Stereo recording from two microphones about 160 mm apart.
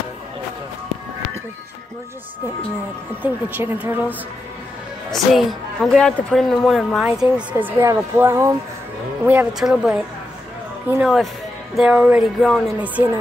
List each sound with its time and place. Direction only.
3.2 s a woman's voice: 10° right (ahead or behind)